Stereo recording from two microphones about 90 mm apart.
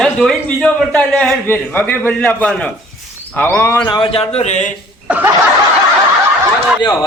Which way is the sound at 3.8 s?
55° left (ahead or behind).